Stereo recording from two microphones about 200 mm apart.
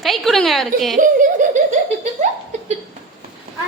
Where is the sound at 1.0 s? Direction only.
40° right (ahead or behind).